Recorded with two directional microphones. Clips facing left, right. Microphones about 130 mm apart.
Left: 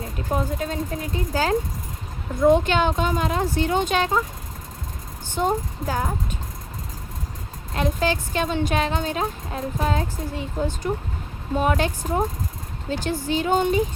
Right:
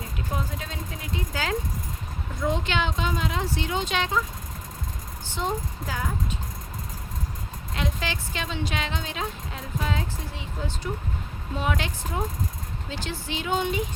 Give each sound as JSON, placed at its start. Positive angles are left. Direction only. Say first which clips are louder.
{"t": 0.3, "sound": "speech", "louder": "left 9 dB", "side_deg": 45}
{"t": 5.3, "sound": "speech", "louder": "left 6 dB", "side_deg": 50}
{"t": 7.8, "sound": "speech", "louder": "left 8 dB", "side_deg": 45}